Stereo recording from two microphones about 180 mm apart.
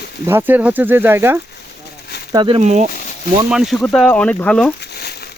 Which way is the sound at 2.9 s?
45° left (ahead or behind).